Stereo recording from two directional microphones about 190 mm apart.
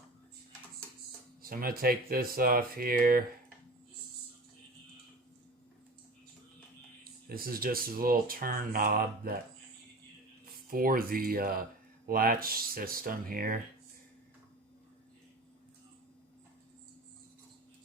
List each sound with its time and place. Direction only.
1.4 s speech: 50° right (ahead or behind)
7.0 s speech: 50° right (ahead or behind)
10.7 s speech: 50° right (ahead or behind)